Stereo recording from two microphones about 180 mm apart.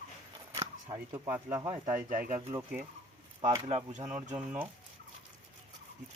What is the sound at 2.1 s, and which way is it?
Speech, 45° right (ahead or behind).